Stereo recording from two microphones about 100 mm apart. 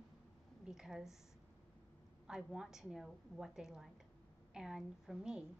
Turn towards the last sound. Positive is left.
turn(degrees=-10)  # may be behind; listen again after turning